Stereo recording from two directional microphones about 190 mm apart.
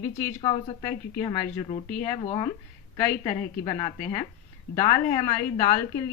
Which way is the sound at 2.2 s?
25° left (ahead or behind).